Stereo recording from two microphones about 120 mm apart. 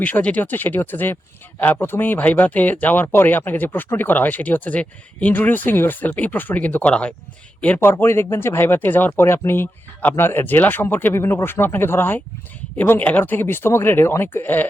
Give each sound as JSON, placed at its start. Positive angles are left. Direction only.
{"t": 0.0, "sound": "speech", "side_deg": 10}